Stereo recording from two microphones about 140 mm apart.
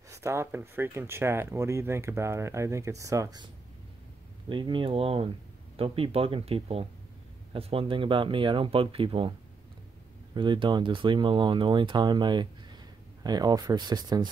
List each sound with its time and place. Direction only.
0.1 s speech: 20° right (ahead or behind)
4.5 s speech: 35° right (ahead or behind)
10.3 s speech: 35° right (ahead or behind)